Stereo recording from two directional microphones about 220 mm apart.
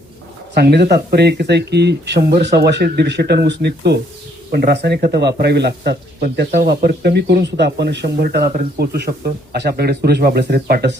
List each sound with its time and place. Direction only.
0.5 s speech: 45° right (ahead or behind)